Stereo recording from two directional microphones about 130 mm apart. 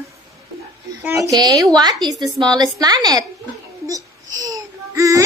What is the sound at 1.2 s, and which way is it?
A woman's voice, 30° right (ahead or behind).